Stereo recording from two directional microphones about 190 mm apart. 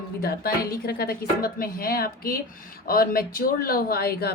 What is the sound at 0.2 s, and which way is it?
Speech, 55° left (ahead or behind).